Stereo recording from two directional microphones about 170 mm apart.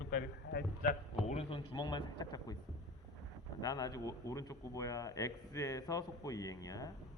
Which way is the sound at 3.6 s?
20° left (ahead or behind).